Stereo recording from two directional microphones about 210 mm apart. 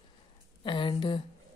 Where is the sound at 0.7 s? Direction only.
25° left (ahead or behind).